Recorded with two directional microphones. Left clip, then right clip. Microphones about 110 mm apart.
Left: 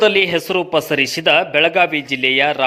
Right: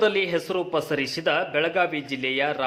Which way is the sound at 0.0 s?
30° left (ahead or behind).